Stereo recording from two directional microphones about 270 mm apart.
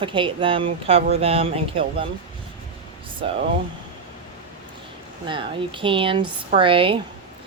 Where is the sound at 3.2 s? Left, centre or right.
Right.